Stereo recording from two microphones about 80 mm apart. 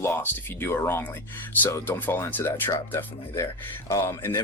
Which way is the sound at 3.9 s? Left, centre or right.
Left.